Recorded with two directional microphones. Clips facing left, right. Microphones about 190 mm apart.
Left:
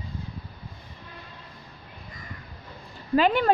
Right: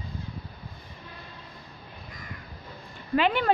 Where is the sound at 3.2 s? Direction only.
40° left (ahead or behind).